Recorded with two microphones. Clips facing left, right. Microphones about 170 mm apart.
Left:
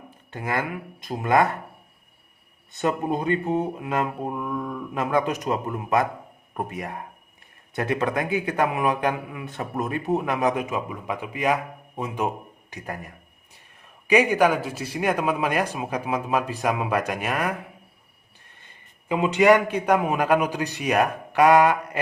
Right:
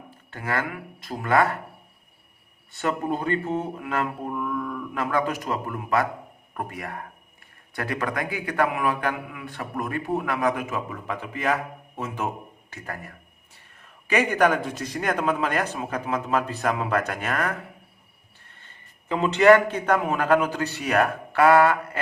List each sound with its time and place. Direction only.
0.3 s a man's voice: 20° left (ahead or behind)
2.7 s a man's voice: 20° left (ahead or behind)
18.6 s a man's voice: 10° left (ahead or behind)